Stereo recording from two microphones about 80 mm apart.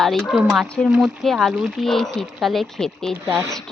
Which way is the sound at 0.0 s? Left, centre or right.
Centre.